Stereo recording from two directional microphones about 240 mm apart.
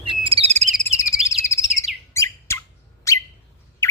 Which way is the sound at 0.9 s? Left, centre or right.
Centre.